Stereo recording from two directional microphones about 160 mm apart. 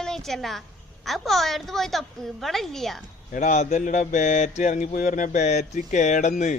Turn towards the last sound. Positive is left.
turn(degrees=50)  # may be behind; listen again after turning